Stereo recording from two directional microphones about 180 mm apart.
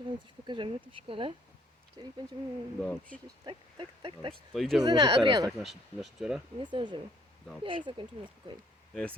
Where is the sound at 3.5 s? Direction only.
30° right (ahead or behind).